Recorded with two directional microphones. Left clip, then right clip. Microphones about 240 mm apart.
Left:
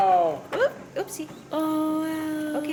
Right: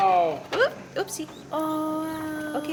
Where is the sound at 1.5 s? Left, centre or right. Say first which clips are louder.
Left 2 dB; left.